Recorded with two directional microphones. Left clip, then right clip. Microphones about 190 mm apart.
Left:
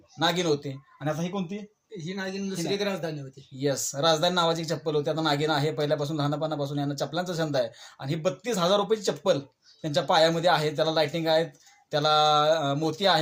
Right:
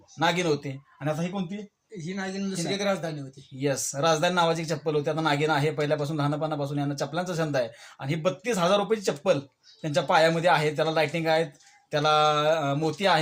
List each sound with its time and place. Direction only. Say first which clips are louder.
0.2 s speech: right 1 dB; 15° right (ahead or behind)
2.0 s speech: even; 10° left (ahead or behind)
3.6 s speech: even; 15° right (ahead or behind)